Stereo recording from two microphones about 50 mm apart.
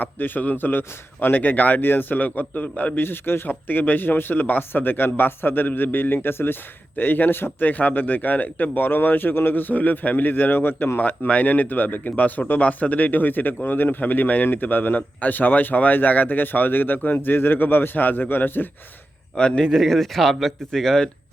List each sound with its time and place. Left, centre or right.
0.0 s a man's voice: left
7.7 s a man's voice: left
19.4 s speech: left
19.6 s speech: centre